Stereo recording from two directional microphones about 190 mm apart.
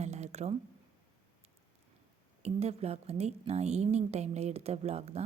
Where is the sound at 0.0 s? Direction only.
35° right (ahead or behind).